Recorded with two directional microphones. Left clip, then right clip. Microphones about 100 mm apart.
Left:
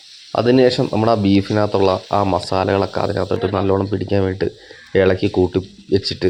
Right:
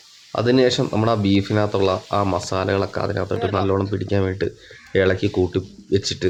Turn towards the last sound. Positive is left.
turn(degrees=15)  # may be behind; listen again after turning